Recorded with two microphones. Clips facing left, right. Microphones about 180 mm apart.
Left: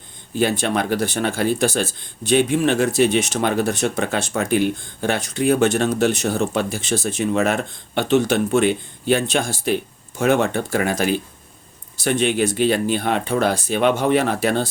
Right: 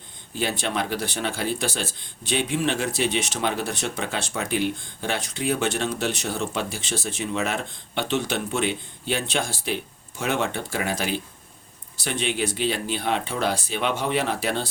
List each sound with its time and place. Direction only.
0.3 s speech: 45° left (ahead or behind)